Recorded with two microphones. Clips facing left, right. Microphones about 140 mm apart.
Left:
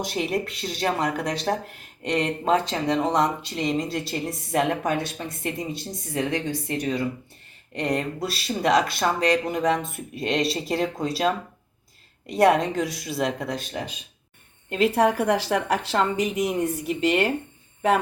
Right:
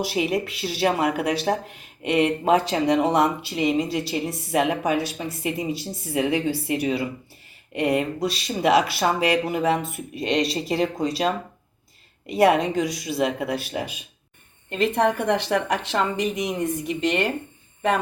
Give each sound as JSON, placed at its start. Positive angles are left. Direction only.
{"t": 0.0, "sound": "speech", "side_deg": -5}
{"t": 14.7, "sound": "speech", "side_deg": 5}